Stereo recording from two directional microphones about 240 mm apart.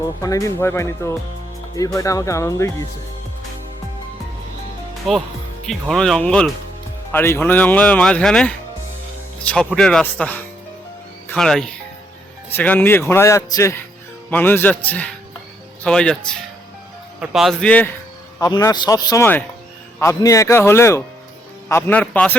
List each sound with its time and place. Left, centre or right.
0.2 s speech: centre
5.1 s speech: centre
17.2 s speech: centre